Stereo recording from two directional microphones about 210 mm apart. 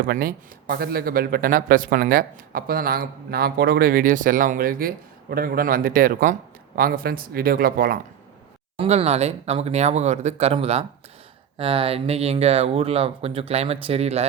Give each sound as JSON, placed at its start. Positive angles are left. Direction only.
{"t": 0.0, "sound": "speech", "side_deg": -45}
{"t": 8.7, "sound": "speech", "side_deg": -30}